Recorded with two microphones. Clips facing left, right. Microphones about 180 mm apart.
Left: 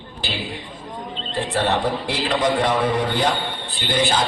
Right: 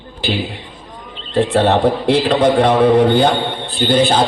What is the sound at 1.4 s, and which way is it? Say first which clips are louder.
A man's voice: right 8 dB; 60° right (ahead or behind).